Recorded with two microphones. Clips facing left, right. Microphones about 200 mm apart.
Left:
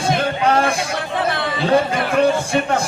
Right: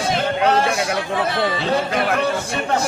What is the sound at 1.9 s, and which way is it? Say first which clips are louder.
Music: left 1 dB; 55° right (ahead or behind).